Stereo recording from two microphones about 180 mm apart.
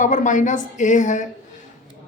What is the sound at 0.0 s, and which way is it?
Speech, 45° left (ahead or behind).